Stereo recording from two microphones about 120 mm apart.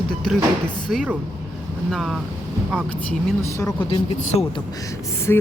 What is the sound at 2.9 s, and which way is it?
Speech, 10° left (ahead or behind).